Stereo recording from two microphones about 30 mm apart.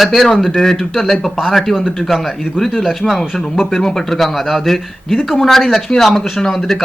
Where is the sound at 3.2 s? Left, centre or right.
Centre.